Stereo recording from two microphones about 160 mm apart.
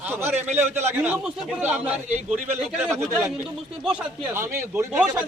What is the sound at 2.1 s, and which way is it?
Speech, 45° right (ahead or behind).